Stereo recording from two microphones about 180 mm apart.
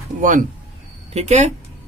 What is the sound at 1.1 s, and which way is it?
Speech, 35° right (ahead or behind).